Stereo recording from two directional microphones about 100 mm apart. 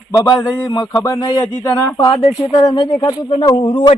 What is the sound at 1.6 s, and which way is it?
Speech, 20° left (ahead or behind).